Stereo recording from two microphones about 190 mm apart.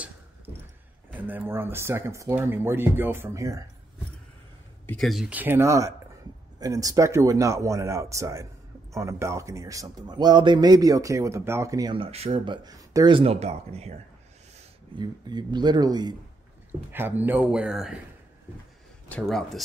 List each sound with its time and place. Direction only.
1.1 s speech: 10° right (ahead or behind)
4.8 s a man's voice: centre (ahead or behind); by 13.9 s 35° right (ahead or behind)
15.0 s a man's voice: 20° right (ahead or behind)
16.9 s speech: 10° right (ahead or behind)
19.0 s speech: 5° left (ahead or behind)